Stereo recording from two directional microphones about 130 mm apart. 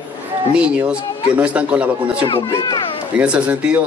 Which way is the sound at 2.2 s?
35° left (ahead or behind).